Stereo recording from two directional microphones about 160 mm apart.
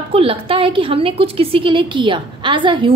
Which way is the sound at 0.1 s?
35° right (ahead or behind).